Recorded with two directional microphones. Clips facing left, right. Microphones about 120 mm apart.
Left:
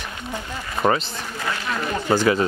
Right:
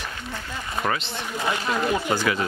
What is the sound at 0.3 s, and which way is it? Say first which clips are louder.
Speech: left 4 dB; 15° left (ahead or behind).